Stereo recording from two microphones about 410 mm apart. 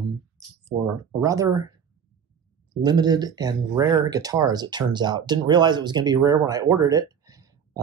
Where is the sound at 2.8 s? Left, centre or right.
Centre.